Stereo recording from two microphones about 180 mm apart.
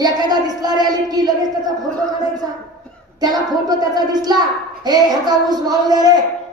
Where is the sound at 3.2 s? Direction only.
20° right (ahead or behind).